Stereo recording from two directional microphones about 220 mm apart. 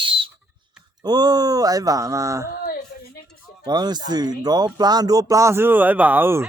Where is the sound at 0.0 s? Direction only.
25° right (ahead or behind).